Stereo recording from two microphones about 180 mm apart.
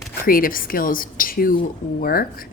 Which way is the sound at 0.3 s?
50° left (ahead or behind).